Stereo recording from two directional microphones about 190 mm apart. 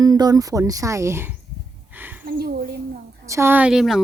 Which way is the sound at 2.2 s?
50° right (ahead or behind).